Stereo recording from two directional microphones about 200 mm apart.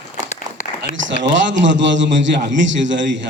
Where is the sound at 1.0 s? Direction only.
65° right (ahead or behind).